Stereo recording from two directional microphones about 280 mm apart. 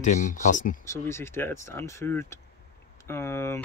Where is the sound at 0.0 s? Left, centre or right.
Left.